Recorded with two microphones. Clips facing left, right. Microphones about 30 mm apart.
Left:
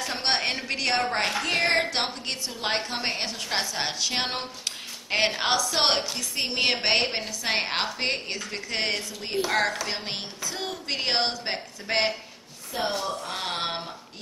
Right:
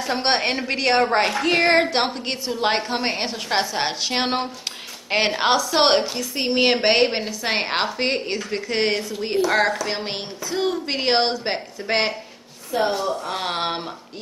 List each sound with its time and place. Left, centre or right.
0.0 s a woman's voice: centre